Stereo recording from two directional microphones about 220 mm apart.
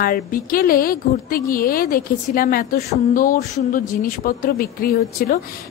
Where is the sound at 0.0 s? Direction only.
40° left (ahead or behind).